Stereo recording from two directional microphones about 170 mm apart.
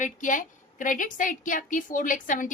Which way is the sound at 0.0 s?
50° left (ahead or behind).